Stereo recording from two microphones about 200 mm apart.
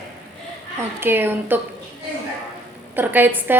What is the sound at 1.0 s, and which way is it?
Speech, 10° right (ahead or behind).